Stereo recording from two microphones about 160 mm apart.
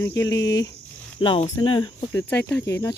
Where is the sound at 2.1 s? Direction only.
15° left (ahead or behind).